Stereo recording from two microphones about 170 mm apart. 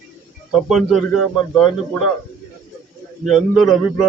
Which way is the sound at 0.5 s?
Centre (ahead or behind).